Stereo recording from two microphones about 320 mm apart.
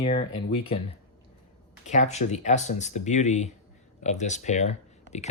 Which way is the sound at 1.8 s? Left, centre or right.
Left.